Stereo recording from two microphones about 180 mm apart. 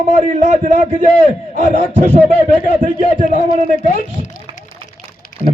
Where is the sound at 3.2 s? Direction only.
40° right (ahead or behind).